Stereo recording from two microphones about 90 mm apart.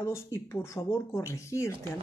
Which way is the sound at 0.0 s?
30° left (ahead or behind).